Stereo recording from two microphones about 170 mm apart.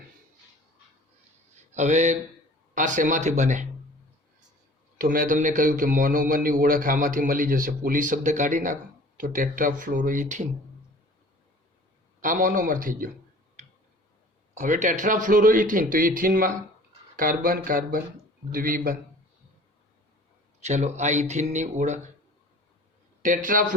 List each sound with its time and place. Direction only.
1.7 s a man's voice: 45° right (ahead or behind)
4.9 s a man's voice: 55° right (ahead or behind)
12.2 s a man's voice: 50° right (ahead or behind)
14.5 s a man's voice: 45° right (ahead or behind)
20.6 s a man's voice: 40° right (ahead or behind)
23.2 s a man's voice: 50° right (ahead or behind)